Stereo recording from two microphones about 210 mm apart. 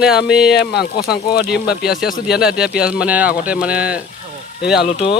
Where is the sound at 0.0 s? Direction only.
5° right (ahead or behind).